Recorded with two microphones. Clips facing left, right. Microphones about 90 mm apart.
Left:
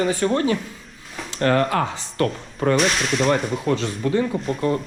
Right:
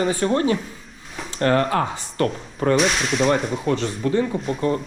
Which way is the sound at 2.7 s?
Centre (ahead or behind).